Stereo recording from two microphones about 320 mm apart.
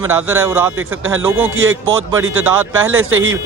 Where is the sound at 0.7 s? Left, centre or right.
Right.